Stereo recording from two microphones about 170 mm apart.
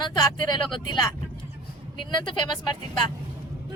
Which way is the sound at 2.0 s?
25° left (ahead or behind).